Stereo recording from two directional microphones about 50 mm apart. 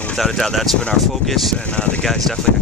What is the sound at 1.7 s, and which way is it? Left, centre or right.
Speech, left.